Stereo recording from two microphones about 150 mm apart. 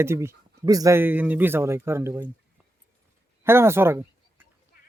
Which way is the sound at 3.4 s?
15° right (ahead or behind).